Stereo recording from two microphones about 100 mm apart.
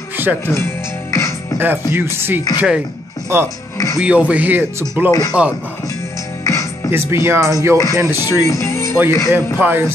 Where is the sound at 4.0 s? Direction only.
10° right (ahead or behind).